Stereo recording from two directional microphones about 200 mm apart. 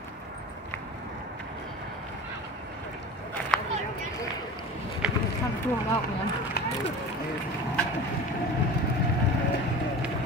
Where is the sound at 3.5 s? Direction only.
5° left (ahead or behind).